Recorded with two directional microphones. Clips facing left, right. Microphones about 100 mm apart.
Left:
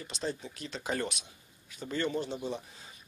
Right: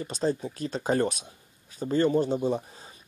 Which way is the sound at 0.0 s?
40° right (ahead or behind).